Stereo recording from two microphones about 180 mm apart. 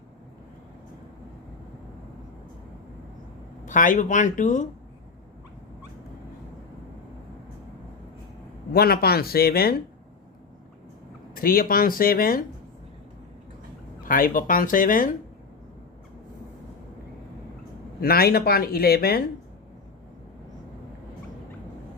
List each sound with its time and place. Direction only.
3.7 s speech: 45° left (ahead or behind)
8.7 s speech: 60° left (ahead or behind)
11.3 s speech: 55° left (ahead or behind)
14.0 s speech: 50° left (ahead or behind)
18.0 s speech: 60° left (ahead or behind)